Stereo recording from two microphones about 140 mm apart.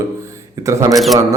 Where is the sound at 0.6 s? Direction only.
25° right (ahead or behind).